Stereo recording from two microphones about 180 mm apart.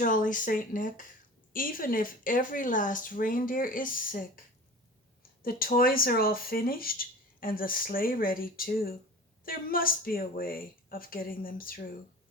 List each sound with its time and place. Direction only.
0.0 s speech: 45° left (ahead or behind)
5.4 s speech: 55° left (ahead or behind)